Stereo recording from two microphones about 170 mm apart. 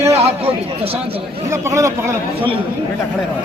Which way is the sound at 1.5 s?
15° right (ahead or behind).